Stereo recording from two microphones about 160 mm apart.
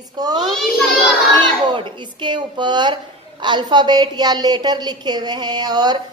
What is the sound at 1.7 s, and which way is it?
A woman's voice, 30° right (ahead or behind).